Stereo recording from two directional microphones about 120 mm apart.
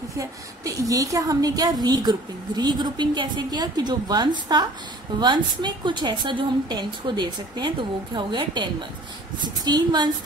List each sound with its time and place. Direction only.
0.2 s a woman's voice: 25° right (ahead or behind)